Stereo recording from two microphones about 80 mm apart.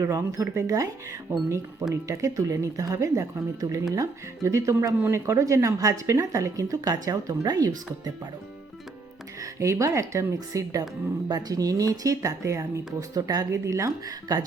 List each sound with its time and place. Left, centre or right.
0.0 s speech: right
9.4 s speech: right
11.3 s speech: right
13.5 s speech: right